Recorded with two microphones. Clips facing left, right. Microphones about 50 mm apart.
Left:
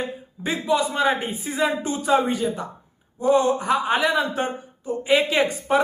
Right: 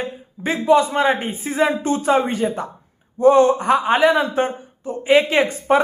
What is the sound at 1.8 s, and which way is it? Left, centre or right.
Speech, right.